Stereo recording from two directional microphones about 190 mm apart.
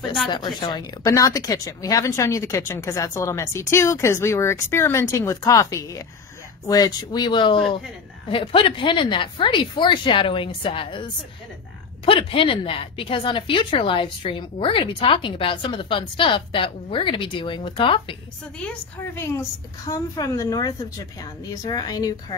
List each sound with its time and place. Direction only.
0.3 s speech: 25° left (ahead or behind)
19.1 s speech: 15° left (ahead or behind)